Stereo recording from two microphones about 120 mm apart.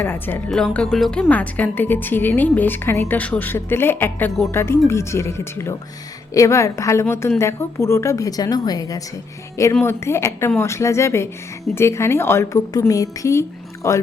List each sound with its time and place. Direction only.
0.0 s a woman's voice: 15° left (ahead or behind); by 9.0 s 30° left (ahead or behind)
9.8 s a woman's voice: 20° left (ahead or behind)